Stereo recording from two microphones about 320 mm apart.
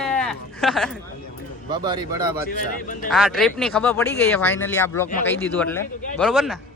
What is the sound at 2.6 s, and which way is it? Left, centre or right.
Speech, left.